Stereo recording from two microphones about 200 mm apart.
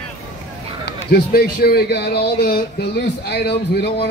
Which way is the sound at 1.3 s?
50° left (ahead or behind).